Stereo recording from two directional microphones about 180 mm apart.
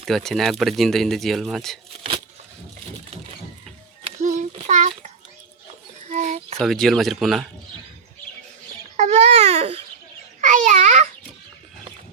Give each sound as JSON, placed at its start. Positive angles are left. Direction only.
{"t": 0.0, "sound": "speech", "side_deg": 0}
{"t": 4.2, "sound": "child singing", "side_deg": -40}
{"t": 6.1, "sound": "a sound", "side_deg": -40}
{"t": 6.6, "sound": "speech", "side_deg": 0}
{"t": 9.0, "sound": "babbling", "side_deg": -40}